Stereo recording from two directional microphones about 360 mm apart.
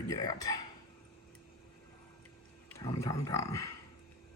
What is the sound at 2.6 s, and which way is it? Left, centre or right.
Speech, centre.